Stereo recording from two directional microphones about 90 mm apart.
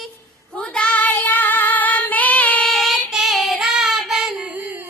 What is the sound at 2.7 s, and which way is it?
Child singing, centre (ahead or behind).